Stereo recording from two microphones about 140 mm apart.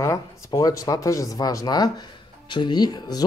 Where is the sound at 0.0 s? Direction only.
25° left (ahead or behind).